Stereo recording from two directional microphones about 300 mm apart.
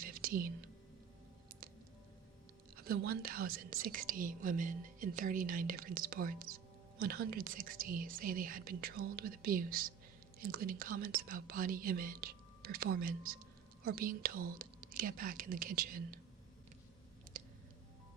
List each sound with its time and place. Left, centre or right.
0.0 s whispering: right
2.7 s speech: right